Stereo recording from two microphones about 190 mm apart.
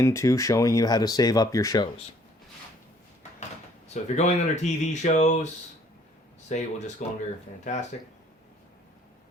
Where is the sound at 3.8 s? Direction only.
35° left (ahead or behind).